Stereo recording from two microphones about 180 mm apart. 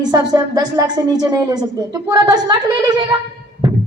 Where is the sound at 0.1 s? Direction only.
20° right (ahead or behind).